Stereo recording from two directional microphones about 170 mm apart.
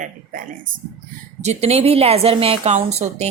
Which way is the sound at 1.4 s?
40° right (ahead or behind).